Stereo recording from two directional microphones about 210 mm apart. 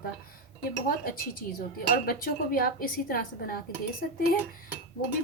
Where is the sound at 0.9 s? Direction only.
45° left (ahead or behind).